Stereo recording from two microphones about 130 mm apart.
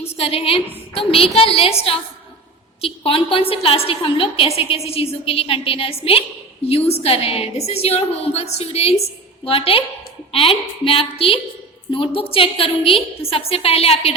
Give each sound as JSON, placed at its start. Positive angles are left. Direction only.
{"t": 0.2, "sound": "a woman's voice", "side_deg": 50}